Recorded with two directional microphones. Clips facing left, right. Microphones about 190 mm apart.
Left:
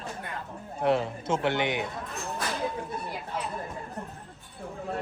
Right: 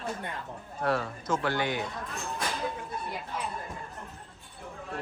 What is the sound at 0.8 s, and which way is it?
A man's voice, 20° left (ahead or behind).